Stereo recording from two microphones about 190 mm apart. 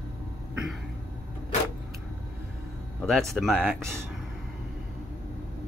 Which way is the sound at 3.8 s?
15° right (ahead or behind).